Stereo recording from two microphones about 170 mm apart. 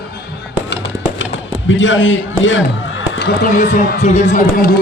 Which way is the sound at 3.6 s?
65° left (ahead or behind).